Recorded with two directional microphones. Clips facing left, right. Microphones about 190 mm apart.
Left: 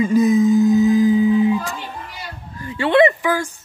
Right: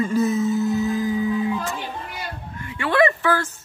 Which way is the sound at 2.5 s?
35° left (ahead or behind).